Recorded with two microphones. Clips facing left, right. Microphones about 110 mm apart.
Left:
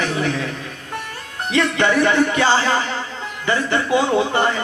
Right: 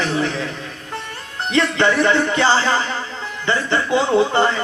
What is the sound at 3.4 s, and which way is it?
Speech, 30° right (ahead or behind).